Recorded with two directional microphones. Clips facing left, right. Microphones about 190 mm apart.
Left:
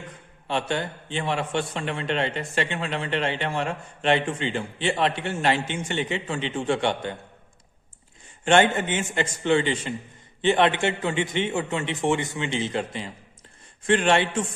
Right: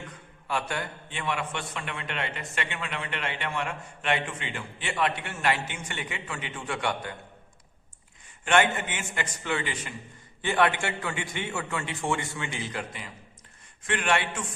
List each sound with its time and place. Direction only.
0.4 s a man's voice: 25° left (ahead or behind)
8.4 s a man's voice: 30° left (ahead or behind)